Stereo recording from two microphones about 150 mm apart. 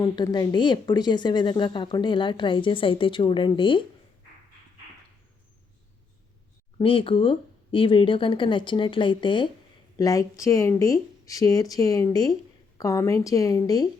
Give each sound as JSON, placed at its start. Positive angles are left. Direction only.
{"t": 0.0, "sound": "a woman's voice", "side_deg": 25}
{"t": 6.7, "sound": "a woman's voice", "side_deg": 35}